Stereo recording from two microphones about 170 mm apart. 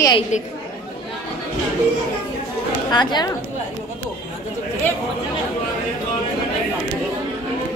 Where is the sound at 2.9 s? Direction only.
25° left (ahead or behind).